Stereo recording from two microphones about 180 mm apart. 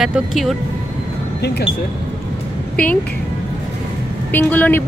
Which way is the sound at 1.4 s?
65° left (ahead or behind).